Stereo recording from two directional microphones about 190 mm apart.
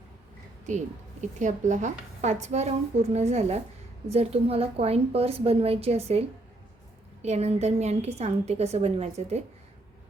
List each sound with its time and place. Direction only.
1.2 s a woman's voice: 40° right (ahead or behind)